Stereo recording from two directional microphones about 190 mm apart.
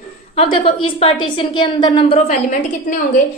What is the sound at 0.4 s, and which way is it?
A woman's voice, 30° left (ahead or behind).